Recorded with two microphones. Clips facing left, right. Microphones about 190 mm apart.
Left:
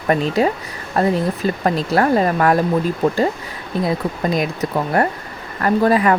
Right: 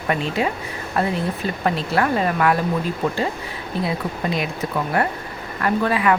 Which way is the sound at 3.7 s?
45° left (ahead or behind).